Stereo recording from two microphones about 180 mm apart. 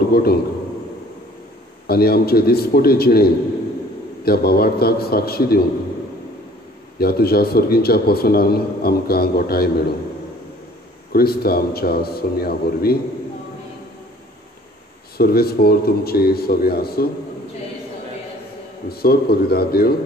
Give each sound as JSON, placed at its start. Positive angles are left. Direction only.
{"t": 0.1, "sound": "a man's voice", "side_deg": 60}
{"t": 1.9, "sound": "a man's voice", "side_deg": 60}
{"t": 7.0, "sound": "a man's voice", "side_deg": 60}
{"t": 11.1, "sound": "a man's voice", "side_deg": 60}
{"t": 15.1, "sound": "a man's voice", "side_deg": 60}
{"t": 18.9, "sound": "a man's voice", "side_deg": 60}